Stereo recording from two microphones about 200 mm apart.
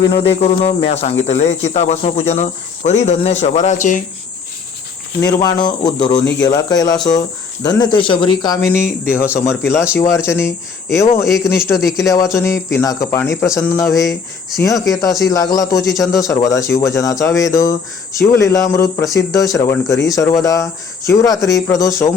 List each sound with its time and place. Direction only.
0.0 s speech: 25° left (ahead or behind)
5.2 s speech: 20° left (ahead or behind)
11.3 s speech: centre (ahead or behind)
11.5 s speech: 15° left (ahead or behind)
14.8 s speech: centre (ahead or behind)
15.3 s speech: 15° left (ahead or behind)